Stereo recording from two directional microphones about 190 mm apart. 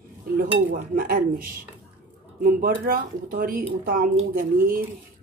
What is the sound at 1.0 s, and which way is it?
Cutlery, 50° right (ahead or behind).